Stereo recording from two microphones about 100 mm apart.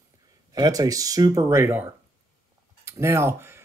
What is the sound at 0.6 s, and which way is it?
Speech, 40° right (ahead or behind).